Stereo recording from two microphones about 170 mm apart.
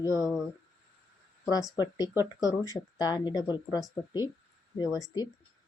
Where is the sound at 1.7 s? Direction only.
25° left (ahead or behind).